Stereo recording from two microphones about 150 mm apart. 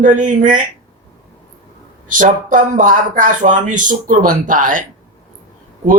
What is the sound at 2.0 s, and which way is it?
A man's voice, 60° right (ahead or behind).